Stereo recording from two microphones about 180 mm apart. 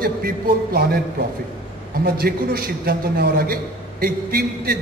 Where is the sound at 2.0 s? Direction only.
60° right (ahead or behind).